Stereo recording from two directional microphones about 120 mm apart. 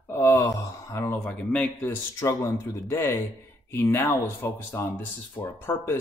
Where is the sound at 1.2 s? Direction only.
10° left (ahead or behind).